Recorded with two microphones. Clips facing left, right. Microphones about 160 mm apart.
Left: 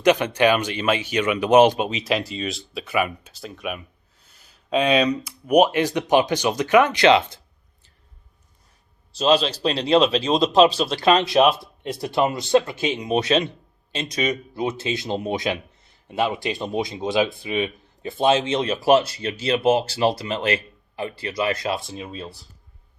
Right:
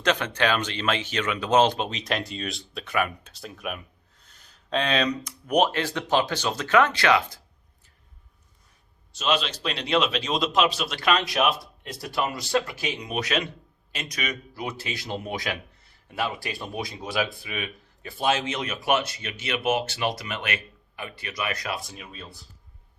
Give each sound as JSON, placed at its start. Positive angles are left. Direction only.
{"t": 0.0, "sound": "speech", "side_deg": 15}
{"t": 9.1, "sound": "speech", "side_deg": 35}